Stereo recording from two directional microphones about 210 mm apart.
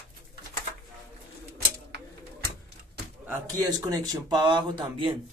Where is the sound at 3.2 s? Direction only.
15° right (ahead or behind).